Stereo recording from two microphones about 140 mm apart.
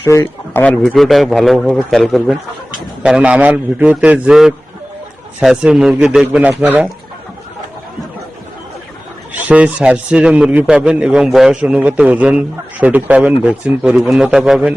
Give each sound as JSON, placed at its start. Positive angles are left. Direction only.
{"t": 0.0, "sound": "speech", "side_deg": 20}
{"t": 0.6, "sound": "a man's voice", "side_deg": 10}
{"t": 9.5, "sound": "a man's voice", "side_deg": -10}